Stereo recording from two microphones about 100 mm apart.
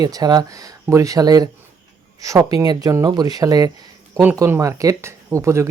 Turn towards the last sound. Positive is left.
turn(degrees=-30)  # may be behind; listen again after turning